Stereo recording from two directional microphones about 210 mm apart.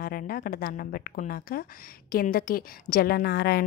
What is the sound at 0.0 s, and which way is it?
A woman's voice, 45° left (ahead or behind).